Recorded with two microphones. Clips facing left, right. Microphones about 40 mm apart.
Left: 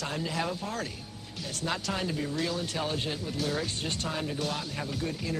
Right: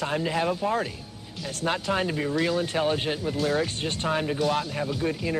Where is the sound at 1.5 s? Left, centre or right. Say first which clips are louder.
Right 6 dB; right.